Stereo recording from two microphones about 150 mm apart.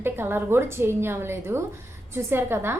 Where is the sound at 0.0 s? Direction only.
15° right (ahead or behind).